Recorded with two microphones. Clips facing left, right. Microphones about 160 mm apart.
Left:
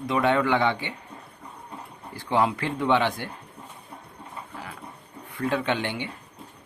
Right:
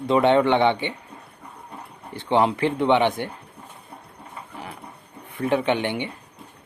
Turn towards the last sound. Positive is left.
turn(degrees=-20)  # may be behind; listen again after turning